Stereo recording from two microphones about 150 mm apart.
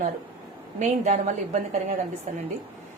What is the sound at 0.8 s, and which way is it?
Speech, 55° right (ahead or behind).